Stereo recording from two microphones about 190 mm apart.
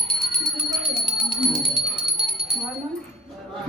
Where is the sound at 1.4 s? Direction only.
Centre (ahead or behind).